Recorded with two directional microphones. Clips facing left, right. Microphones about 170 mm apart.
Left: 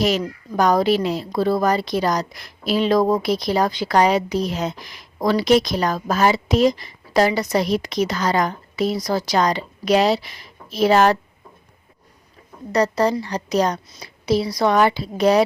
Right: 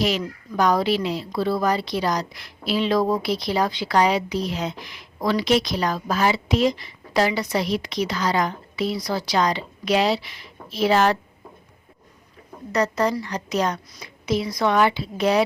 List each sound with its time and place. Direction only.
0.0 s speech: 45° left (ahead or behind)
12.7 s a woman's voice: 35° left (ahead or behind)